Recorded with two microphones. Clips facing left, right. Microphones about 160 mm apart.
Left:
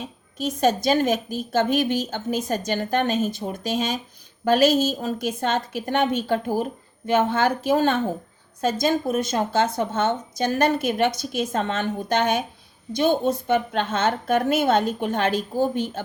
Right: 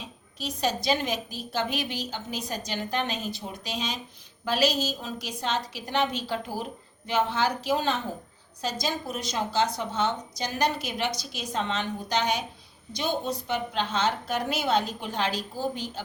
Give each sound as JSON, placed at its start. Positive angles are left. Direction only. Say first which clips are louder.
{"t": 0.0, "sound": "a woman's voice", "louder": "left 8 dB", "side_deg": 50}